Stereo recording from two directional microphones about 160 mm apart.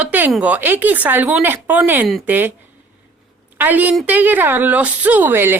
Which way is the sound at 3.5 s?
10° right (ahead or behind).